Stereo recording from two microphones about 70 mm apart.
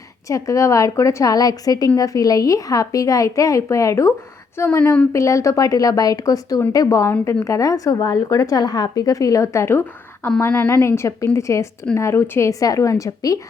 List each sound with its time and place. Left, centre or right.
0.3 s speech: left
4.5 s a woman's voice: left